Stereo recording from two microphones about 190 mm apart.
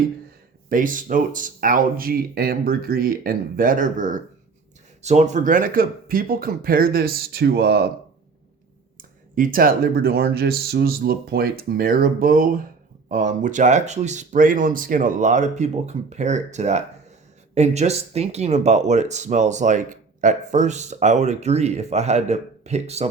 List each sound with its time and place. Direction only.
0.7 s speech: 45° right (ahead or behind)
9.0 s speech: 45° right (ahead or behind)